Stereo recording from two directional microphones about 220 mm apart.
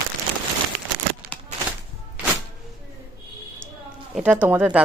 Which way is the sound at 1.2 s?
45° right (ahead or behind).